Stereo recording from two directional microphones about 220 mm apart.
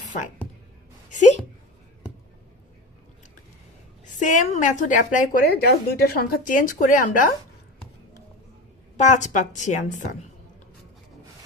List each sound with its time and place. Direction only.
4.2 s a woman's voice: 35° left (ahead or behind)
9.0 s a woman's voice: 35° left (ahead or behind)